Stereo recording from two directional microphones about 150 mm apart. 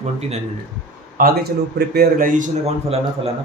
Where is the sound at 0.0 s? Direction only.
45° right (ahead or behind).